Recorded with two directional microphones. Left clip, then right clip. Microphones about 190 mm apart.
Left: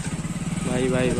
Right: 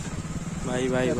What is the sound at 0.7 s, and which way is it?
Speech, 15° right (ahead or behind).